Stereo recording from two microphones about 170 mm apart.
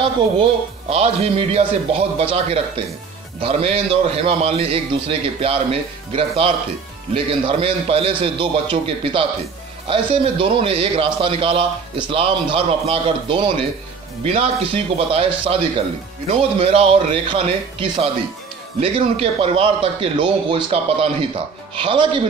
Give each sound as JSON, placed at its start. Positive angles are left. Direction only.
{"t": 0.0, "sound": "a man's voice", "side_deg": -35}